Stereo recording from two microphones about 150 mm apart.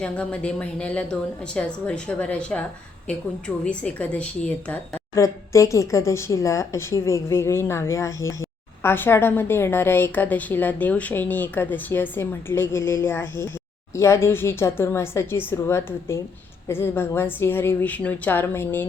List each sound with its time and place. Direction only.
0.0 s a woman's voice: 10° left (ahead or behind)
3.6 s a woman's voice: 10° left (ahead or behind)
5.1 s a woman's voice: 20° left (ahead or behind)